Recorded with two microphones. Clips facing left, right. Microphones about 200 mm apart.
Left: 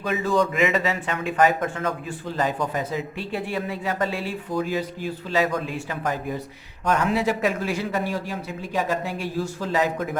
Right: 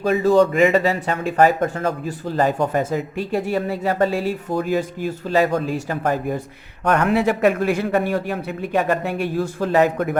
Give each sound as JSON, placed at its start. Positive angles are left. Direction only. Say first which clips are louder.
{"t": 0.0, "sound": "speech", "louder": "right 7 dB", "side_deg": -35}
{"t": 6.0, "sound": "speech", "louder": "right 4 dB", "side_deg": -55}